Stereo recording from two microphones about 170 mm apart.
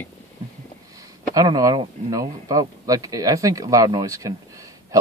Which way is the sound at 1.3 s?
20° right (ahead or behind).